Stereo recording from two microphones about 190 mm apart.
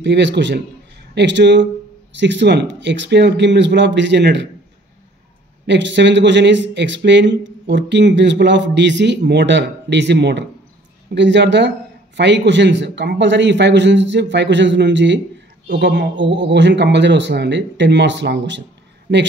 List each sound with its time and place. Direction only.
0.0 s speech: 65° right (ahead or behind)
5.7 s speech: 70° right (ahead or behind)